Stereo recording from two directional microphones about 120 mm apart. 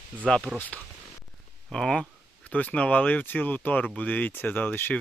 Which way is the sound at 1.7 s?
5° left (ahead or behind).